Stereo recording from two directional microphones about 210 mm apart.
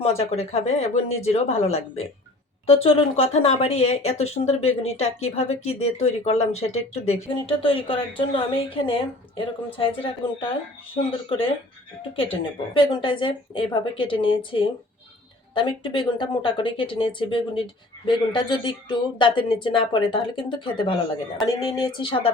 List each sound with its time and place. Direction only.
0.2 s speech: 30° left (ahead or behind)